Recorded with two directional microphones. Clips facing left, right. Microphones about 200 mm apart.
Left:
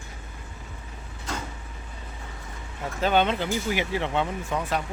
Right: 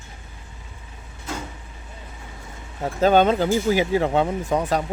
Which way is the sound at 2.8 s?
40° right (ahead or behind).